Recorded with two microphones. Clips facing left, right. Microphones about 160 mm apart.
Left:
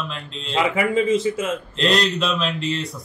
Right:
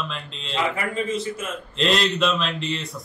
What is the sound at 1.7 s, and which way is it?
Speech, centre (ahead or behind).